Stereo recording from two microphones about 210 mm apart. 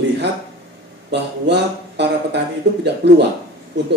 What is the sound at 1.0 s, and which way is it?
Speech, 55° right (ahead or behind).